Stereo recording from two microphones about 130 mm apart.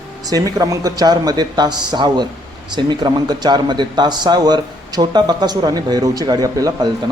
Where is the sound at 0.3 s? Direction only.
25° right (ahead or behind).